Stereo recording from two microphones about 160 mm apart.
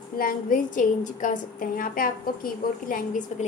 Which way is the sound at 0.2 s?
60° left (ahead or behind).